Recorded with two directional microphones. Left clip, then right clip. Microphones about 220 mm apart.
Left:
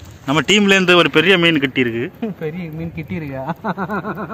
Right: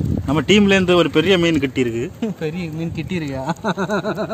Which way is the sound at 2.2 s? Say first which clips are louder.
Right 1 dB; 35° right (ahead or behind).